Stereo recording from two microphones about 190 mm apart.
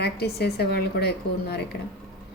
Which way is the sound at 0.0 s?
60° left (ahead or behind).